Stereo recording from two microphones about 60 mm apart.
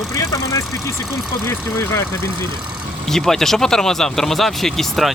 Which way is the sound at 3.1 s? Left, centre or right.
Centre.